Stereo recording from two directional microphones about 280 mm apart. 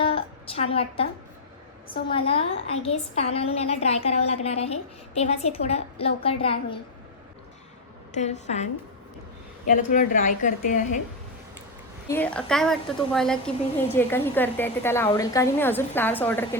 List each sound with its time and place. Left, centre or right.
0.0 s a sound: centre
2.0 s a woman's voice: centre
8.1 s a woman's voice: left
12.0 s a woman's voice: centre